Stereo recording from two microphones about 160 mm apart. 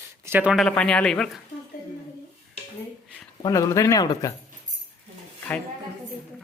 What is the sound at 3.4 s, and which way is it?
Speech, 20° left (ahead or behind).